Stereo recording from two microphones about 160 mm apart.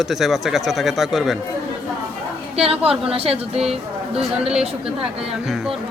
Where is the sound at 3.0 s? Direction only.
35° right (ahead or behind).